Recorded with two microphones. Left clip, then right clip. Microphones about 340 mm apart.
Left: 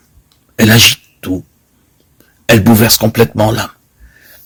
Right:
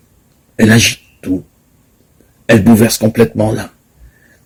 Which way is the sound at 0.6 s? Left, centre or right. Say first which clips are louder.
Left 3 dB; left.